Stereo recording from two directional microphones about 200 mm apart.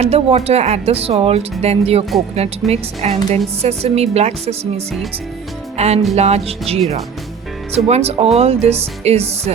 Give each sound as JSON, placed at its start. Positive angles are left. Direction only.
{"t": 0.0, "sound": "a woman's voice", "side_deg": -30}
{"t": 5.7, "sound": "music", "side_deg": -30}
{"t": 6.1, "sound": "a woman's voice", "side_deg": -30}
{"t": 7.9, "sound": "a woman's voice", "side_deg": -30}